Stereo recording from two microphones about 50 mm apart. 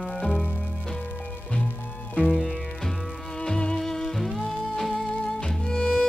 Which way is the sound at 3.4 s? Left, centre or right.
Centre.